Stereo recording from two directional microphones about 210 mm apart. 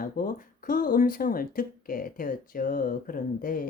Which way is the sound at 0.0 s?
40° left (ahead or behind).